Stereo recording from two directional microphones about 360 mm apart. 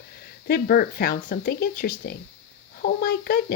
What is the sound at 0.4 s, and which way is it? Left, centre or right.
Speech, left.